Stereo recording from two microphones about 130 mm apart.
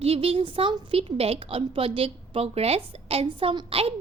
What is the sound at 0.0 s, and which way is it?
A woman's voice, 50° right (ahead or behind).